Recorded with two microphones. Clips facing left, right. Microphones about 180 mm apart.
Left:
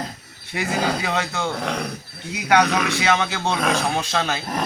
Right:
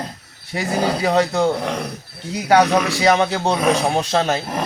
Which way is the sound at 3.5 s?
10° right (ahead or behind).